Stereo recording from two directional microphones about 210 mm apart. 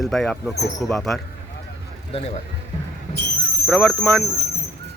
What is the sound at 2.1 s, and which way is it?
Speech, 30° left (ahead or behind).